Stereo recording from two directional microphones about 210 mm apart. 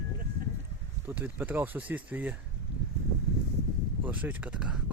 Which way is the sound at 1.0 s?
10° right (ahead or behind).